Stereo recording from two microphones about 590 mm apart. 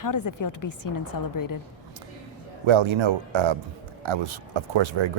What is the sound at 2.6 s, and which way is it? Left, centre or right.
Speech, right.